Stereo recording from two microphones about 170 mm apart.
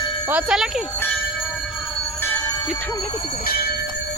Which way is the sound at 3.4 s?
60° left (ahead or behind).